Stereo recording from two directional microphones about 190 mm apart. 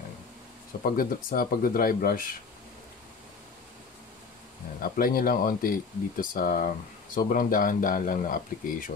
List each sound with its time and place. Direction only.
0.8 s speech: 50° left (ahead or behind)
4.8 s speech: 50° left (ahead or behind)